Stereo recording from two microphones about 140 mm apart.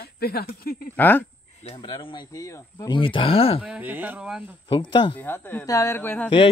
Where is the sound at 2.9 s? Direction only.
40° left (ahead or behind).